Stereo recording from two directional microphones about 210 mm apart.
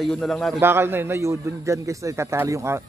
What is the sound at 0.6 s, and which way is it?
Speech, 10° right (ahead or behind).